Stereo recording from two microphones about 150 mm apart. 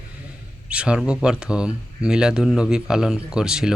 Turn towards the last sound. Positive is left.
turn(degrees=-5)  # may be behind; listen again after turning